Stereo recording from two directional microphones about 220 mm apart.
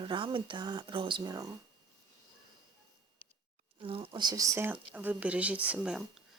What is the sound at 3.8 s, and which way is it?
Speech, 25° right (ahead or behind).